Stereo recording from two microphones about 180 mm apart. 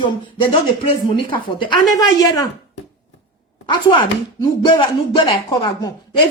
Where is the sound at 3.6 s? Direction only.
25° left (ahead or behind).